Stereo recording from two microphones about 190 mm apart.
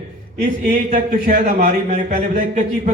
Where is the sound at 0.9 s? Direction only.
45° right (ahead or behind).